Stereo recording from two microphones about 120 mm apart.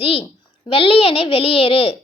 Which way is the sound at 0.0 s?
50° left (ahead or behind).